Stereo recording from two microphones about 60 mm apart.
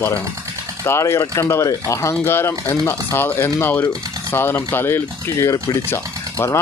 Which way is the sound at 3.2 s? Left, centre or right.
Left.